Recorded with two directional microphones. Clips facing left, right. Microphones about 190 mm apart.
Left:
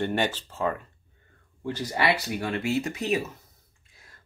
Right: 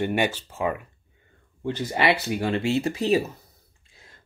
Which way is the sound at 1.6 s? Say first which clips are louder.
Right 3 dB; 25° right (ahead or behind).